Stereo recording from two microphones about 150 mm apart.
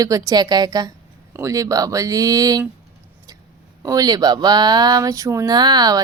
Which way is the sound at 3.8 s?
25° right (ahead or behind).